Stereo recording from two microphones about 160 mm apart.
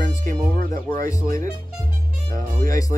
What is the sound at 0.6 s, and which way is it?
Music, 60° right (ahead or behind).